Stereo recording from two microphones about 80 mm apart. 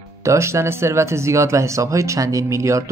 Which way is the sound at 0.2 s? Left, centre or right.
Right.